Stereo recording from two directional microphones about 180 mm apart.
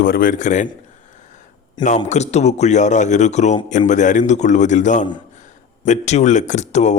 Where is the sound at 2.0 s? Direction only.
40° left (ahead or behind).